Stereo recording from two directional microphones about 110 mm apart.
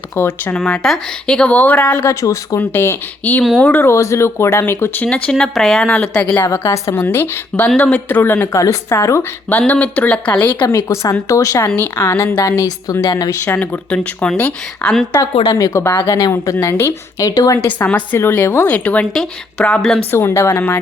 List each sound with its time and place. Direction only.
0.2 s a woman's voice: 20° left (ahead or behind)
0.5 s speech: 5° left (ahead or behind)
2.0 s a woman's voice: 30° left (ahead or behind); by 5.9 s centre (ahead or behind)
5.9 s a woman's voice: 15° left (ahead or behind)
10.8 s a woman's voice: 30° left (ahead or behind)
13.4 s a woman's voice: 15° left (ahead or behind)
17.7 s speech: 15° left (ahead or behind)
20.1 s a woman's voice: 20° left (ahead or behind)